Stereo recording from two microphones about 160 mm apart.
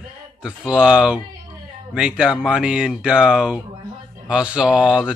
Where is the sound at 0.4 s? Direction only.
5° right (ahead or behind).